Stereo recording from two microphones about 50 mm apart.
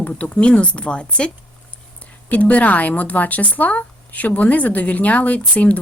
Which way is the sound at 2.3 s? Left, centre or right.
Left.